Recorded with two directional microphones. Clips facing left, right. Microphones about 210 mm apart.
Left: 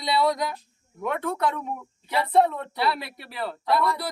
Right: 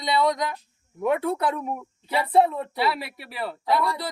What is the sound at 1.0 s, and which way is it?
Speech, 10° right (ahead or behind).